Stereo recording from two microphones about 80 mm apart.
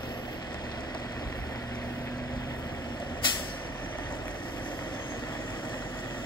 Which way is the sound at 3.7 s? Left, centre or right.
Left.